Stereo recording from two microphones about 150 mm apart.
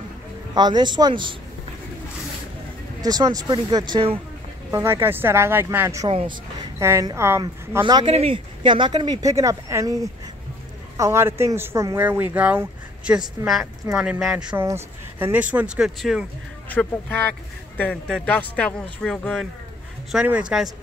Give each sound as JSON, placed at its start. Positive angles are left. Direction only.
{"t": 0.6, "sound": "speech", "side_deg": -30}
{"t": 3.0, "sound": "speech", "side_deg": -25}
{"t": 4.6, "sound": "speech", "side_deg": -15}
{"t": 6.0, "sound": "speech", "side_deg": -35}
{"t": 6.8, "sound": "speech", "side_deg": -20}
{"t": 7.8, "sound": "speech", "side_deg": -35}
{"t": 14.6, "sound": "speech", "side_deg": -15}
{"t": 16.6, "sound": "speech", "side_deg": 10}
{"t": 20.1, "sound": "speech", "side_deg": -5}